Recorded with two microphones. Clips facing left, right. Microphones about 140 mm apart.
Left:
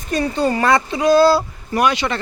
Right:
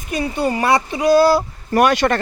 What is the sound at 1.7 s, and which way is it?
Speech, 50° right (ahead or behind).